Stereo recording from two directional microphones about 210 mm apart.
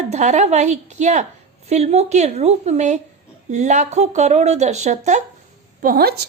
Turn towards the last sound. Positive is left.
turn(degrees=-45)  # may be behind; listen again after turning